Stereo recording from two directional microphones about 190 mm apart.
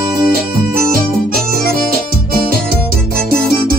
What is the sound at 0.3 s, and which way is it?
Music, 50° right (ahead or behind).